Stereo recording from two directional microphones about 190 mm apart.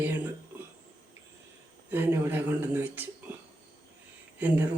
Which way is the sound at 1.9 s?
10° right (ahead or behind).